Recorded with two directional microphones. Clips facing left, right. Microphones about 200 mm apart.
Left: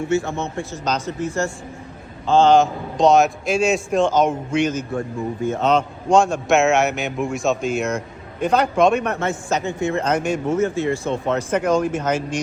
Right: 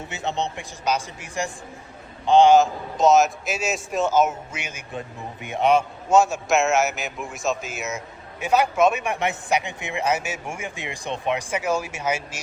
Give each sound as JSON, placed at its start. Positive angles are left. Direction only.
{"t": 0.1, "sound": "a man's voice", "side_deg": -20}
{"t": 2.6, "sound": "a man's voice", "side_deg": 0}